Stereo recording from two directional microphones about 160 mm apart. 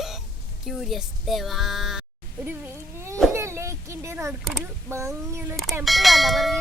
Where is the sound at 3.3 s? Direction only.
15° right (ahead or behind).